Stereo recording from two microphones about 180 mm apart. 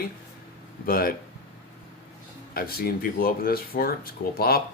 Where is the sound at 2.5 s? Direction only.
55° left (ahead or behind).